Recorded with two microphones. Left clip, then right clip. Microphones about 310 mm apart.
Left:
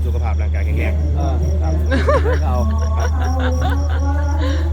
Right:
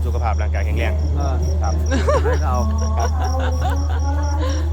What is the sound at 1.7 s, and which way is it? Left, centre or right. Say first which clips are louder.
Music: left 2 dB; centre.